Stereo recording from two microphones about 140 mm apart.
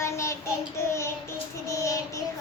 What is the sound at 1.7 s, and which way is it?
Child singing, 20° left (ahead or behind).